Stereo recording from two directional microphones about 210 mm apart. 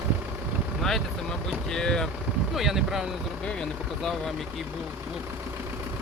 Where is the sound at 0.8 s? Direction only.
Centre (ahead or behind).